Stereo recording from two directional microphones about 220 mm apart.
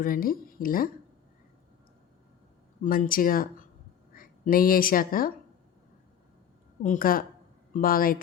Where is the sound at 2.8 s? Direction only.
40° left (ahead or behind).